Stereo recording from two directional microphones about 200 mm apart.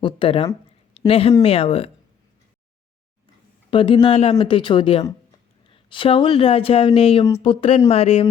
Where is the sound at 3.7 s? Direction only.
25° left (ahead or behind).